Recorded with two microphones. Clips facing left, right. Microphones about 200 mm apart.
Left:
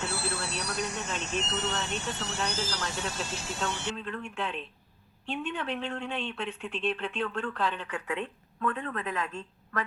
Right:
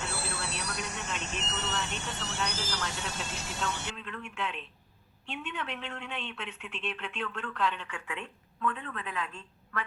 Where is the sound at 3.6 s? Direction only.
35° left (ahead or behind).